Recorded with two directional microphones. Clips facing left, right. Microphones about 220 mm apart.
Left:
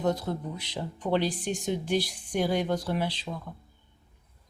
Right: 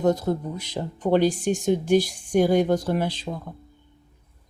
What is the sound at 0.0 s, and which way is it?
Speech, 45° right (ahead or behind).